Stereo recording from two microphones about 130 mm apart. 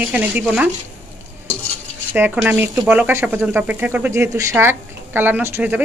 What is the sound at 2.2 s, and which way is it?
Speech, 15° right (ahead or behind).